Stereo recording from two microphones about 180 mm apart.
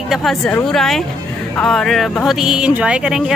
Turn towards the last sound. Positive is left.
turn(degrees=-5)  # may be behind; listen again after turning